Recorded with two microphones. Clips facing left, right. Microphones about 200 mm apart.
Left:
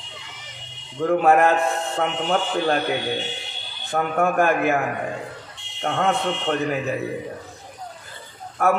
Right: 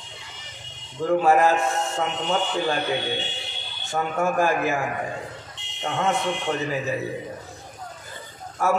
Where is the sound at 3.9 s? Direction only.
60° left (ahead or behind).